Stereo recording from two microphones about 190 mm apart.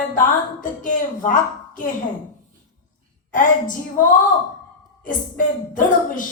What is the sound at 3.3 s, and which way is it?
Speech, 45° left (ahead or behind).